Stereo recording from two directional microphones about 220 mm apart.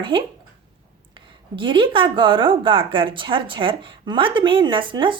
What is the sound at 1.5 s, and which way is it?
A woman's voice, 20° right (ahead or behind).